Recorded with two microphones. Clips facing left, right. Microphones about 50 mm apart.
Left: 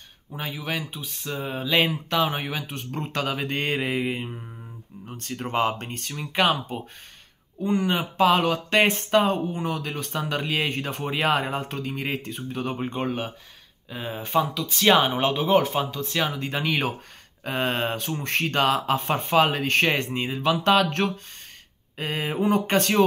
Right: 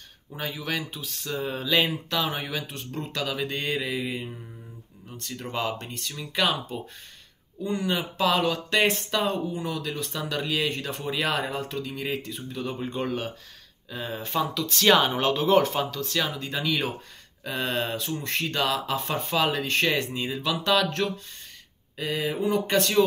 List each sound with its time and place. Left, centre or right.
0.3 s speech: centre; by 12.8 s left
12.8 s speech: left